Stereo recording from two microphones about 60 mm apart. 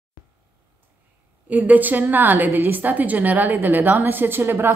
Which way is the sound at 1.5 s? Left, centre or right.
Right.